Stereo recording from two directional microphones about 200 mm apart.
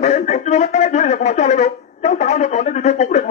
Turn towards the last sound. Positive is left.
turn(degrees=35)  # may be behind; listen again after turning